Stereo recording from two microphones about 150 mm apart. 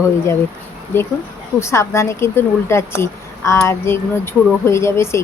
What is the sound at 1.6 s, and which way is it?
Speech, 20° left (ahead or behind).